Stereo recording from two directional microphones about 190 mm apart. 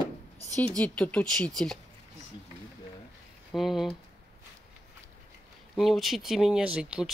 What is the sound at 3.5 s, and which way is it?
Speech, centre (ahead or behind).